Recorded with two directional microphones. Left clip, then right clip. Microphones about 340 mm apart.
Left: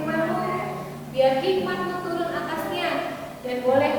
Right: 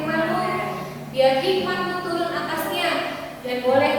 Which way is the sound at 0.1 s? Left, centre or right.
Centre.